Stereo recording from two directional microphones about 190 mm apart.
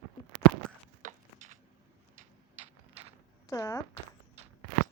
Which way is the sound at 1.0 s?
40° right (ahead or behind).